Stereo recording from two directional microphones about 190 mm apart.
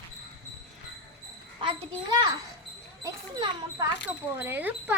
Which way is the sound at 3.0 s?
20° right (ahead or behind).